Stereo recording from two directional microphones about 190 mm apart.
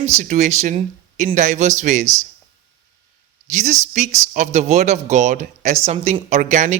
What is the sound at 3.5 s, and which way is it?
Speech, 40° right (ahead or behind).